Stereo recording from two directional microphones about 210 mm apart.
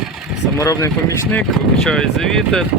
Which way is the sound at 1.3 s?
5° left (ahead or behind).